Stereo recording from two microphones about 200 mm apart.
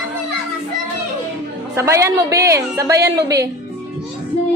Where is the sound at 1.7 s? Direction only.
15° right (ahead or behind).